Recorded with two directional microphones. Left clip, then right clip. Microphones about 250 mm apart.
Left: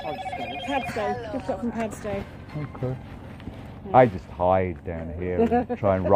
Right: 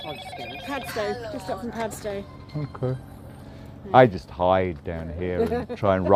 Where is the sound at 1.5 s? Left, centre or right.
Centre.